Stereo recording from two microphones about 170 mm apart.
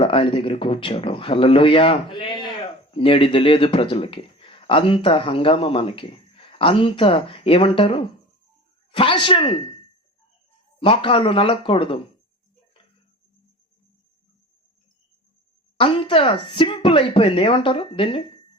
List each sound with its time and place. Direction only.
0.0 s speech: 30° left (ahead or behind)
10.8 s speech: 30° left (ahead or behind)
15.8 s speech: 30° left (ahead or behind)